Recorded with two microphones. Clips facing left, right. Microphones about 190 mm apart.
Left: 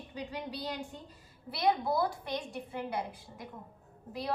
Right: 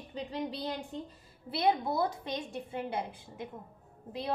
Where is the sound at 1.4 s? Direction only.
25° right (ahead or behind).